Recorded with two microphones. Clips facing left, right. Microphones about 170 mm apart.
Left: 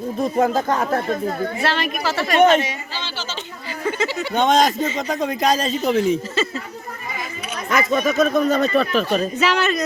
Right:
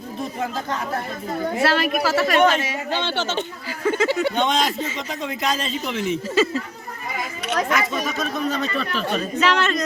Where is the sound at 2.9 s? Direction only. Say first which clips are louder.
Right 7 dB; 60° right (ahead or behind).